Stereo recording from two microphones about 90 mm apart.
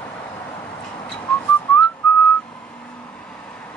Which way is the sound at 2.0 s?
15° left (ahead or behind).